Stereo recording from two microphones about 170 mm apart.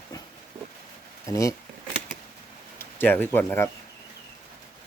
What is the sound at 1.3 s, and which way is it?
Speech, 20° left (ahead or behind).